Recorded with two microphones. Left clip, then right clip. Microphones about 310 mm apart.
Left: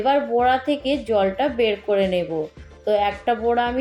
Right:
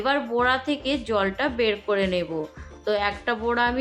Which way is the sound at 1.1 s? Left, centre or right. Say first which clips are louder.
Left 5 dB; centre.